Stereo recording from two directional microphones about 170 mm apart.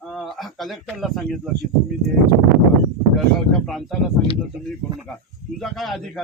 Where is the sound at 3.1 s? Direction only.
Centre (ahead or behind).